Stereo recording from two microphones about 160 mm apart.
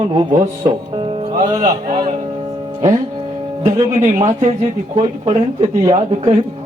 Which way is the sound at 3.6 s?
50° right (ahead or behind).